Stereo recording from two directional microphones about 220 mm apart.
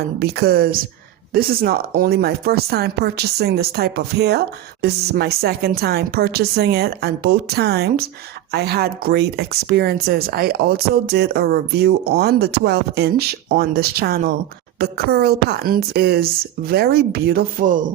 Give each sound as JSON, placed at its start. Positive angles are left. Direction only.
{"t": 0.2, "sound": "speech", "side_deg": -45}